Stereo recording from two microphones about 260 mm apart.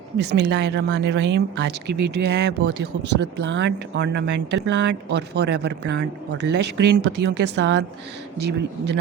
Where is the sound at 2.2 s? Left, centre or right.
Right.